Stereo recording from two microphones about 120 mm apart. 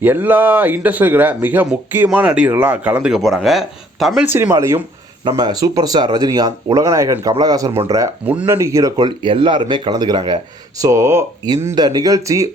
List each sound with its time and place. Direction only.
0.0 s speech: 15° right (ahead or behind); by 4.3 s centre (ahead or behind)
4.3 s speech: 15° right (ahead or behind)
5.4 s speech: 35° right (ahead or behind)
8.3 s speech: 10° right (ahead or behind)
8.5 s speech: 25° right (ahead or behind)
11.7 s speech: 35° right (ahead or behind)